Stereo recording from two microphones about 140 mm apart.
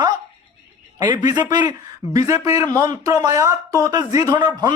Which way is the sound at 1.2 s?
30° right (ahead or behind).